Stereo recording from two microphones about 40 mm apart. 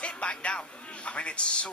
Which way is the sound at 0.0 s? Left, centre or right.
Left.